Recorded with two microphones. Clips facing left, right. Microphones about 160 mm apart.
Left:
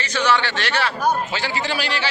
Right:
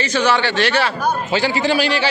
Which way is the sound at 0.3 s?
10° right (ahead or behind).